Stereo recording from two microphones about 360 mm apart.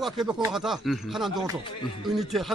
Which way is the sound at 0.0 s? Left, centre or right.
Centre.